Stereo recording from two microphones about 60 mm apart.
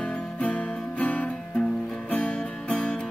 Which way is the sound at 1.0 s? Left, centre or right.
Left.